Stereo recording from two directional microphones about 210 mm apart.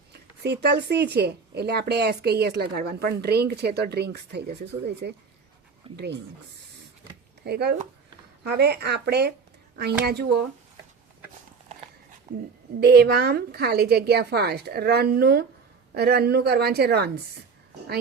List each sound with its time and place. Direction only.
0.1 s speech: 50° right (ahead or behind)
5.8 s speech: 25° right (ahead or behind)
7.4 s speech: 50° right (ahead or behind)
12.3 s speech: 35° right (ahead or behind)
12.8 s speech: 50° right (ahead or behind)